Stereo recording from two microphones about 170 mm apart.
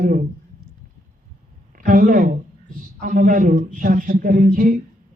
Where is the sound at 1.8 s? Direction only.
55° right (ahead or behind).